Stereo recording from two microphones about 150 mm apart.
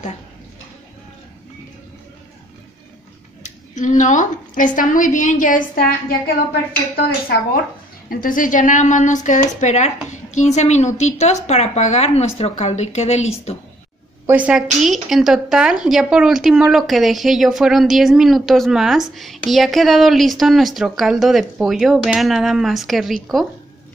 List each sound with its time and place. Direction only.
3.4 s a woman's voice: 55° left (ahead or behind)
8.1 s speech: 65° left (ahead or behind); by 13.6 s 45° left (ahead or behind)
14.2 s a woman's voice: 10° right (ahead or behind)